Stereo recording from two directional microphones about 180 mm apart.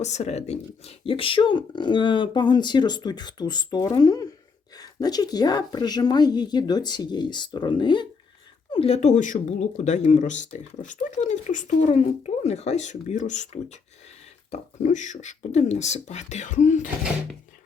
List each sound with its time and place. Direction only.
0.0 s speech: 40° left (ahead or behind)